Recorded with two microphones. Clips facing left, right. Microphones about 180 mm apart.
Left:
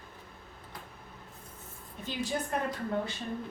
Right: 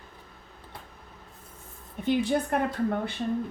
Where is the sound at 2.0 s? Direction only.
60° right (ahead or behind).